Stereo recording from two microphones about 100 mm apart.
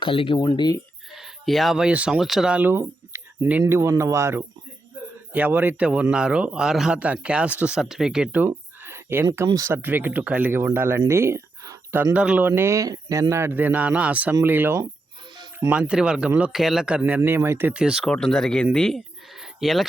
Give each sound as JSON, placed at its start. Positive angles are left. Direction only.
{"t": 0.0, "sound": "speech", "side_deg": 60}
{"t": 0.3, "sound": "speech", "side_deg": 45}
{"t": 1.1, "sound": "speech", "side_deg": 0}
{"t": 2.7, "sound": "a sound", "side_deg": -25}
{"t": 3.7, "sound": "speech", "side_deg": -25}
{"t": 8.3, "sound": "a sound", "side_deg": -20}
{"t": 9.6, "sound": "speech", "side_deg": -25}
{"t": 11.1, "sound": "a sound", "side_deg": -25}
{"t": 12.1, "sound": "speech", "side_deg": -15}
{"t": 17.0, "sound": "speech", "side_deg": -20}
{"t": 18.1, "sound": "speech", "side_deg": 5}